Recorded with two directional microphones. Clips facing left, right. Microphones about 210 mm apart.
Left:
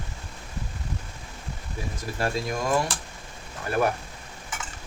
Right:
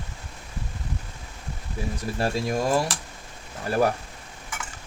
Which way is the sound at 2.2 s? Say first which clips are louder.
Right 2 dB; 30° right (ahead or behind).